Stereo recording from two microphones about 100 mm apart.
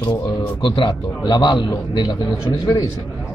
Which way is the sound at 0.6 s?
55° left (ahead or behind).